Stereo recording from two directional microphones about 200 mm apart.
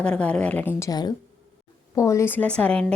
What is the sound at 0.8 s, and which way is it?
A woman's voice, 20° left (ahead or behind).